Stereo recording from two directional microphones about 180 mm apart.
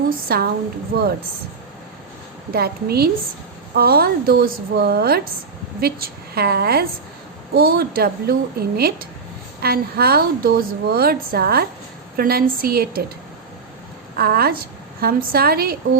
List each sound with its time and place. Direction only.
0.1 s a woman's voice: 55° right (ahead or behind)
2.5 s a woman's voice: 60° right (ahead or behind)
14.2 s a woman's voice: 60° right (ahead or behind)